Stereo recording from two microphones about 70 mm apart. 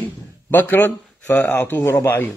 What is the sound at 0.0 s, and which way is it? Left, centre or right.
A man's voice, left.